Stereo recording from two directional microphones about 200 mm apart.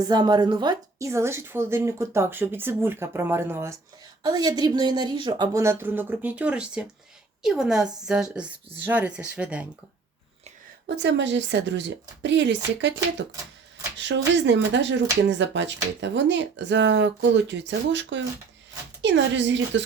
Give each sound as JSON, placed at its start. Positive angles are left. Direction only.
{"t": 0.0, "sound": "a woman's voice", "side_deg": -20}
{"t": 10.8, "sound": "speech", "side_deg": -55}